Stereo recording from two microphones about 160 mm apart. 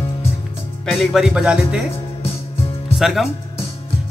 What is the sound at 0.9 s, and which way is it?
Speech, centre (ahead or behind).